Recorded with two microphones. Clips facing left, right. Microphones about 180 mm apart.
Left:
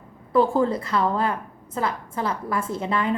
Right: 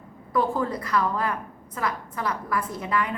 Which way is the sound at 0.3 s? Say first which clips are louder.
Left 5 dB; 25° left (ahead or behind).